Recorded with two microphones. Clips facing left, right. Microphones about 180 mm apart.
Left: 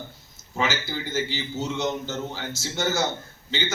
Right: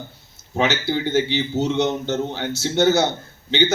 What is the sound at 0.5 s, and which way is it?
A man's voice, 65° right (ahead or behind).